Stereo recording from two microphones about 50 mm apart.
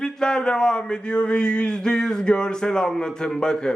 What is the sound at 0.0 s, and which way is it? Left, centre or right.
A man's voice, centre.